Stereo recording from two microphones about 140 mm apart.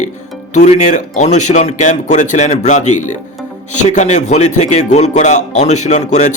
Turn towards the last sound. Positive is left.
turn(degrees=55)  # may be behind; listen again after turning